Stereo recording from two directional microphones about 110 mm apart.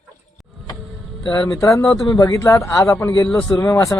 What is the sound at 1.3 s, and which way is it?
Speech, 25° left (ahead or behind).